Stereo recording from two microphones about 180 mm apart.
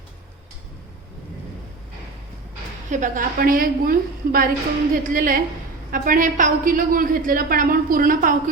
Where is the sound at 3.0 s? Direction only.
45° right (ahead or behind).